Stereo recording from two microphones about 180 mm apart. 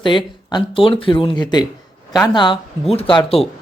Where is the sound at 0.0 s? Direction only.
25° left (ahead or behind).